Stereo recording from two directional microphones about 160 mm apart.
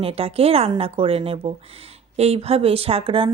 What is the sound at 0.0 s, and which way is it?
Speech, 35° right (ahead or behind).